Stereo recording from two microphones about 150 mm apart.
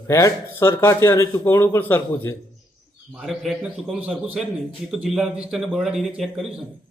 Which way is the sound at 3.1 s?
Centre (ahead or behind).